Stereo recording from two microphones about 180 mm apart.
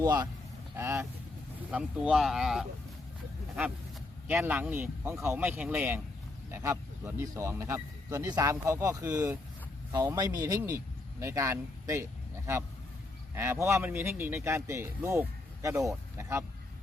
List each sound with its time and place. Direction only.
0.0 s speech: 20° right (ahead or behind)
1.7 s speech: 5° right (ahead or behind)
4.3 s speech: 10° right (ahead or behind)